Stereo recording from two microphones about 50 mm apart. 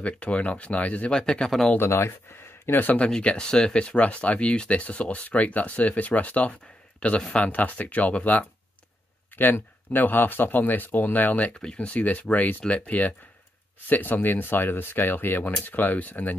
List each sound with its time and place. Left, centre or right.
0.0 s speech: left
1.1 s speech: centre
1.8 s speech: left
2.6 s speech: left
3.1 s speech: centre
9.8 s speech: left
11.5 s speech: left